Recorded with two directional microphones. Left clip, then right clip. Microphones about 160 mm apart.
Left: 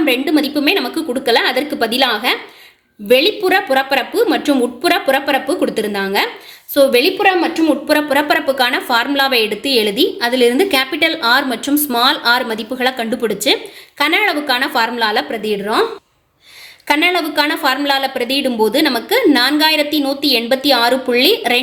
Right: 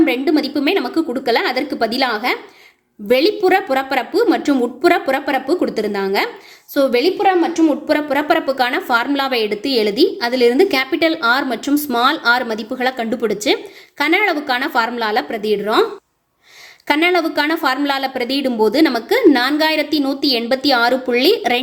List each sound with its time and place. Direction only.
0.0 s a woman's voice: 30° right (ahead or behind)
16.9 s a woman's voice: 35° right (ahead or behind)